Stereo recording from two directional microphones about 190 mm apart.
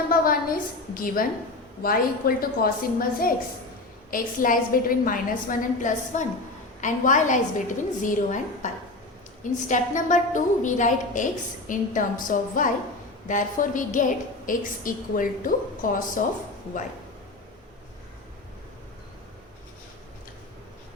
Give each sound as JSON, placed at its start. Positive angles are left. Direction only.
{"t": 0.1, "sound": "a woman's voice", "side_deg": 50}